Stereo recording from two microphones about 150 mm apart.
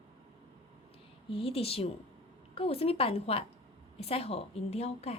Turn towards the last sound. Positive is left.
turn(degrees=45)  # may be behind; listen again after turning